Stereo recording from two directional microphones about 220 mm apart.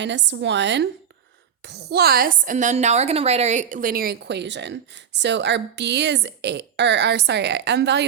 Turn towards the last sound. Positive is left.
turn(degrees=-50)  # may be behind; listen again after turning